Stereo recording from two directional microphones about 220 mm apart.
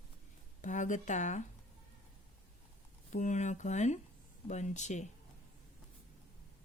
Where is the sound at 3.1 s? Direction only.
35° left (ahead or behind).